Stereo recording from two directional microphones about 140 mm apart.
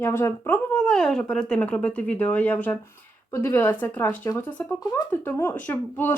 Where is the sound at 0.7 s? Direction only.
5° left (ahead or behind).